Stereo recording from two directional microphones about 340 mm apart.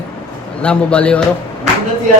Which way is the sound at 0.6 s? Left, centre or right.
Centre.